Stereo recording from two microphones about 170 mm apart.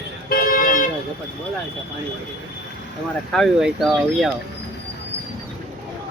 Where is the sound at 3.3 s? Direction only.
Centre (ahead or behind).